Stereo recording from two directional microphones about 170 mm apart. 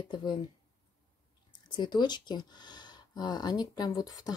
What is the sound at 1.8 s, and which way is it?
Speech, 25° left (ahead or behind).